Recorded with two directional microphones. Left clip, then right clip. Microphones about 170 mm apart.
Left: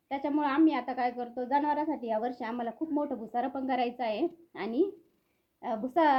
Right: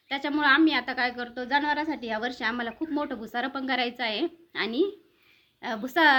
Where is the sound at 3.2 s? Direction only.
15° left (ahead or behind).